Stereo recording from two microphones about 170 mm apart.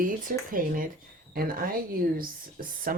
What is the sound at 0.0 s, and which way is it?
Speech, 55° right (ahead or behind).